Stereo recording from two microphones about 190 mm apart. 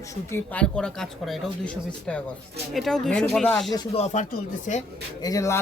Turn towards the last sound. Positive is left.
turn(degrees=15)  # may be behind; listen again after turning